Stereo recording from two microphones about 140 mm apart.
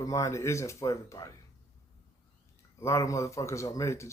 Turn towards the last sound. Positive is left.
turn(degrees=20)  # may be behind; listen again after turning